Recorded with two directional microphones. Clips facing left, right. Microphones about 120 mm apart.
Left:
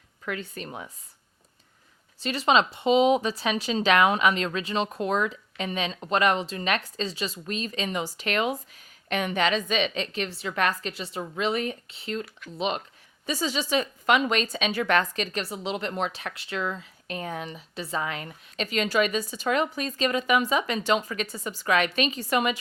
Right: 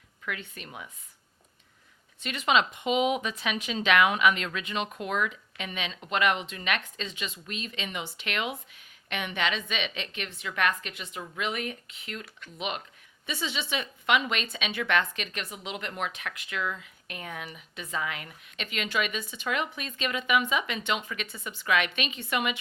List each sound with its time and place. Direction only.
0.3 s a woman's voice: 35° left (ahead or behind)
2.2 s a woman's voice: 30° left (ahead or behind)